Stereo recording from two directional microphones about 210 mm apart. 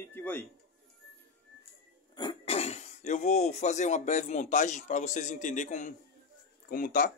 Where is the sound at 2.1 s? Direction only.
25° left (ahead or behind); by 7.1 s 40° left (ahead or behind).